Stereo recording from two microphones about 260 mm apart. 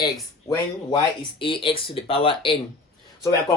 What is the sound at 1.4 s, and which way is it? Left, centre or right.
Speech, centre.